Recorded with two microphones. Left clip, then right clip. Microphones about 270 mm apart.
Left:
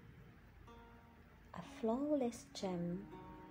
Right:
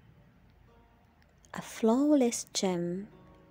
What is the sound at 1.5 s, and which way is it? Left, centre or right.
A woman's voice, right.